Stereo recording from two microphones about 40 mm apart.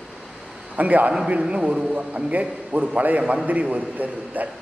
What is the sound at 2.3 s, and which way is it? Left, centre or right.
A man's voice, right.